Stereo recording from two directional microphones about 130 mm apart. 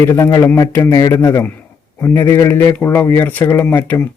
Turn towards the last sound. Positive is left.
turn(degrees=15)  # may be behind; listen again after turning